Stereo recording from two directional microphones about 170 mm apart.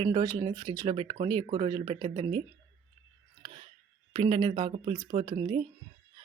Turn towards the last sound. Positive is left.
turn(degrees=-30)  # may be behind; listen again after turning